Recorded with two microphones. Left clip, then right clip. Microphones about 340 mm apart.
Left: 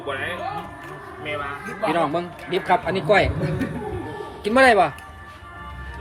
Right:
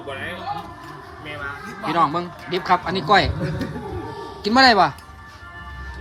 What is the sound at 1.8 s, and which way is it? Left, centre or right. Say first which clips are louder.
A man's voice: right 2 dB; centre.